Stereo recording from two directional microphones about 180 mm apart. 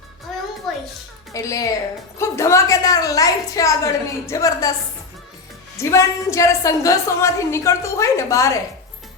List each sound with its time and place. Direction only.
1.3 s a woman's voice: 20° left (ahead or behind)
5.7 s a woman's voice: 15° left (ahead or behind)